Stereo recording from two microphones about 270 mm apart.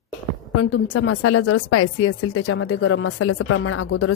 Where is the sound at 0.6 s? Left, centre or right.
Left.